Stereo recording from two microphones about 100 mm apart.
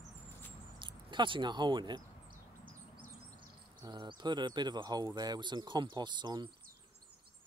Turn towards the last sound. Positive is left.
turn(degrees=-45)  # may be behind; listen again after turning